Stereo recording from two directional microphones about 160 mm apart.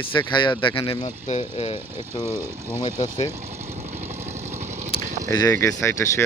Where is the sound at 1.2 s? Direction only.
40° left (ahead or behind).